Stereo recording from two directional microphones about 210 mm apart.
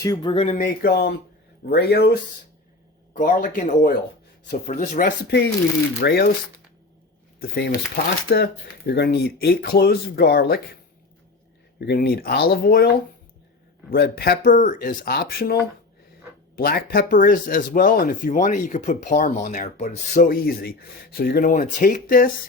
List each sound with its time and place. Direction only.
0.0 s speech: 20° left (ahead or behind)
0.4 s speech: 40° left (ahead or behind)
3.1 s speech: 40° left (ahead or behind)
6.0 s speech: 50° left (ahead or behind)
7.3 s speech: 50° left (ahead or behind)
11.8 s speech: 50° left (ahead or behind)
13.9 s speech: 45° left (ahead or behind)
16.6 s speech: 45° left (ahead or behind)